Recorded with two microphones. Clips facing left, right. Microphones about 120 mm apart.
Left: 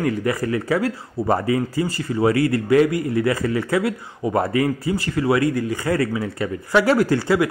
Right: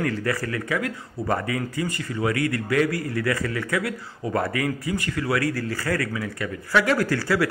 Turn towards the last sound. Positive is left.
turn(degrees=25)  # may be behind; listen again after turning